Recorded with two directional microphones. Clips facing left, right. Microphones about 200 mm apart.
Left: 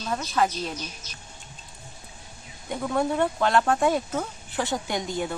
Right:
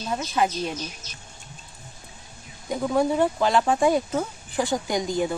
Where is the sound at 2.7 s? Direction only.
5° right (ahead or behind).